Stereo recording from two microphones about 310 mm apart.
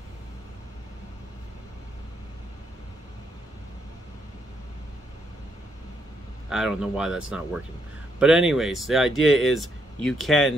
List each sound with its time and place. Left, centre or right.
6.5 s speech: centre